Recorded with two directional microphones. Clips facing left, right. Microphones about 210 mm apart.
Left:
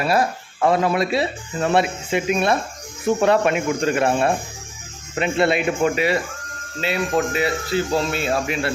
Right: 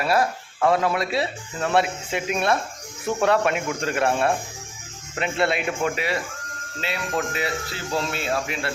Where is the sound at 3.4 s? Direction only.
10° left (ahead or behind).